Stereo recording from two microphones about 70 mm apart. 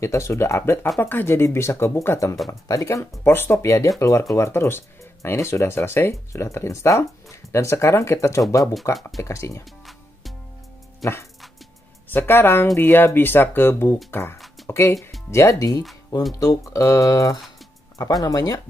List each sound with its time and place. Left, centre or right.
0.0 s speech: left
3.3 s speech: left
12.1 s speech: left